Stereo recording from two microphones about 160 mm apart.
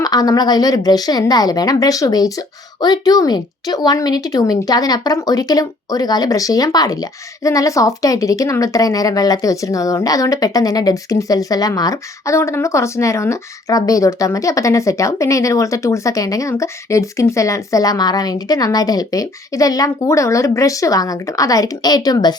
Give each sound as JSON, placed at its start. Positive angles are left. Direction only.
{"t": 0.0, "sound": "speech", "side_deg": 25}